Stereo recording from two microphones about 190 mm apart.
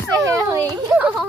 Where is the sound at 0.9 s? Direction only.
Centre (ahead or behind).